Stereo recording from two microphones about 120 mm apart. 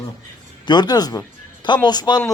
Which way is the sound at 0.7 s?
35° left (ahead or behind).